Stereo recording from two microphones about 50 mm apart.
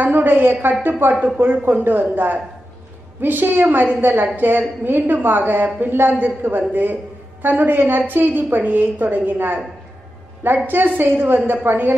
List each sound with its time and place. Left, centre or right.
0.0 s a woman's voice: right
10.7 s a woman's voice: right